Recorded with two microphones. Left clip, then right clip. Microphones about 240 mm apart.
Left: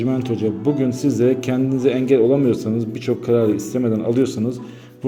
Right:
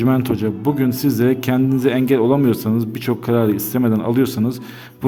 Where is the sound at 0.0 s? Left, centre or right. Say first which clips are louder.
Right 2 dB; right.